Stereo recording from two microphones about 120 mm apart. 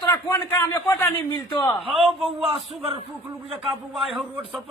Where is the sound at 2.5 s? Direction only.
50° right (ahead or behind).